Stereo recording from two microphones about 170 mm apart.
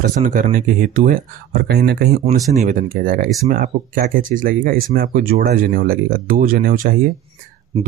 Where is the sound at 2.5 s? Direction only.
45° right (ahead or behind).